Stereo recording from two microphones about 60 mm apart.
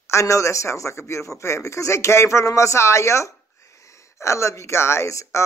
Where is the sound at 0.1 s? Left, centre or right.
Left.